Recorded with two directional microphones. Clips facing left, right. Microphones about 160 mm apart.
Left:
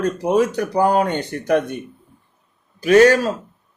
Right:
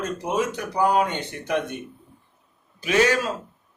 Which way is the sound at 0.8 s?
40° left (ahead or behind).